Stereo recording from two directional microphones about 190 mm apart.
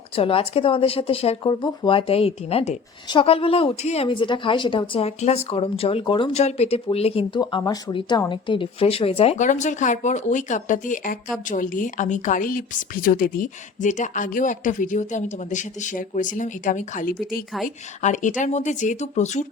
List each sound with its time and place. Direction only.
0.2 s speech: 30° left (ahead or behind)